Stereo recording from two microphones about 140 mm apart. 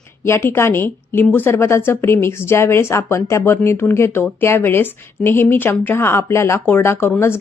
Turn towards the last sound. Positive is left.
turn(degrees=15)  # may be behind; listen again after turning